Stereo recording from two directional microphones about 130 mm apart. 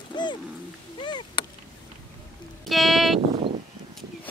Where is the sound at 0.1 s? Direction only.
35° left (ahead or behind).